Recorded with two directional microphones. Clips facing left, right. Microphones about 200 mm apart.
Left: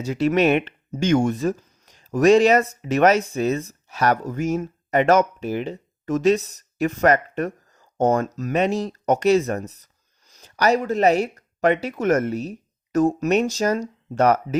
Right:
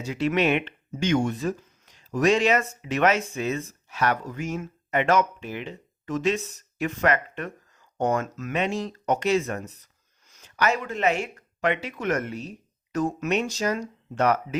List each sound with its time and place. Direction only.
0.0 s speech: 40° left (ahead or behind)